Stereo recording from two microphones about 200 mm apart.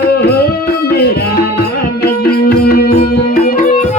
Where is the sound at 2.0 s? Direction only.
50° left (ahead or behind).